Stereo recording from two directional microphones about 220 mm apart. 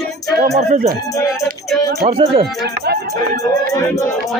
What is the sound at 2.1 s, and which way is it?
Speech, 25° right (ahead or behind).